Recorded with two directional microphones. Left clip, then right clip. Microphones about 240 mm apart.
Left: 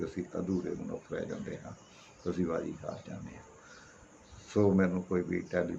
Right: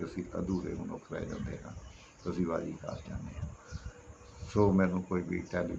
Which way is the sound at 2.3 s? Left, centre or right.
Centre.